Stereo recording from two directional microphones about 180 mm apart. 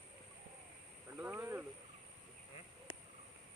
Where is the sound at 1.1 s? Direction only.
10° right (ahead or behind).